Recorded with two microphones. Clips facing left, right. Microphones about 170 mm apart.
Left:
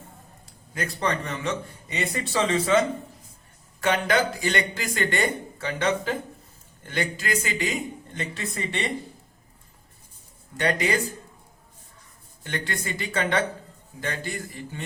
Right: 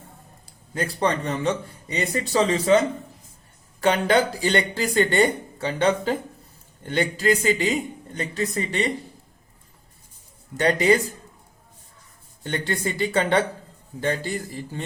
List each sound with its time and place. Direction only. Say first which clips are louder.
0.7 s speech: right 4 dB; 30° right (ahead or behind)
3.8 s speech: right 3 dB; 30° right (ahead or behind)
10.6 s speech: right 6 dB; 35° right (ahead or behind)
12.4 s speech: right 5 dB; 30° right (ahead or behind)